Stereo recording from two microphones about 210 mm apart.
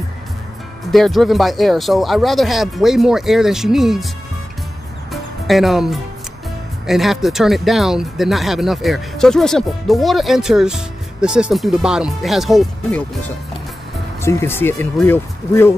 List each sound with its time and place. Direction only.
0.9 s speech: centre (ahead or behind)
5.1 s music: centre (ahead or behind)
6.9 s speech: centre (ahead or behind)
14.2 s speech: 10° left (ahead or behind)